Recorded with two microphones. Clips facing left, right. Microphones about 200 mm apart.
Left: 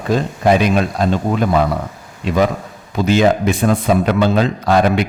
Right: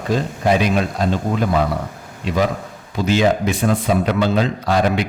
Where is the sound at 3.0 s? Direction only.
55° left (ahead or behind).